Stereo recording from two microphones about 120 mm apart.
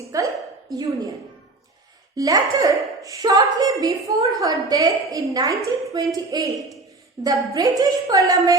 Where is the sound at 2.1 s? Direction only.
30° right (ahead or behind).